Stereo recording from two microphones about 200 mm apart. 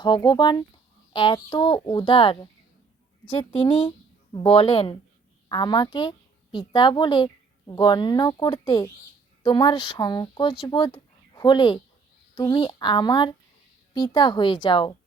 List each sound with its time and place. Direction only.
0.0 s a child's voice: 20° left (ahead or behind)